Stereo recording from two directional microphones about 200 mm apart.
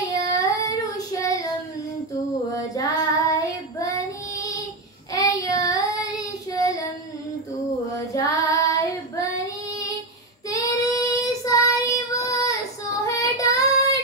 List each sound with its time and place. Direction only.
0.1 s child singing: 15° left (ahead or behind)
8.1 s child singing: 15° left (ahead or behind)
10.5 s child singing: 15° left (ahead or behind)